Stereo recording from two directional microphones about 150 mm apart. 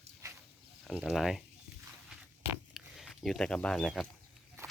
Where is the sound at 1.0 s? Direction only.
Centre (ahead or behind).